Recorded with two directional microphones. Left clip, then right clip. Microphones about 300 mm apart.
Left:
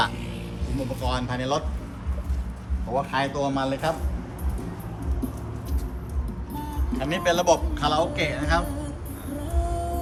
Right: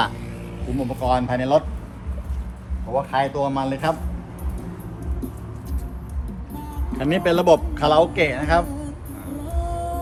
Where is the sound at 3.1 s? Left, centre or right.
Right.